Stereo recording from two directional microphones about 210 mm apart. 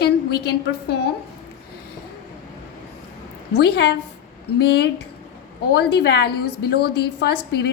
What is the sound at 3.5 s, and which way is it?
A woman's voice, 50° left (ahead or behind).